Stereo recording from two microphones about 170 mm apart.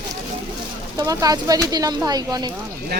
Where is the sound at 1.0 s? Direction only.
20° right (ahead or behind).